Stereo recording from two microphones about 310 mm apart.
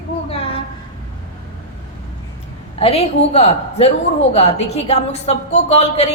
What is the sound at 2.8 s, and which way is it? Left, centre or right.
A woman's voice, centre.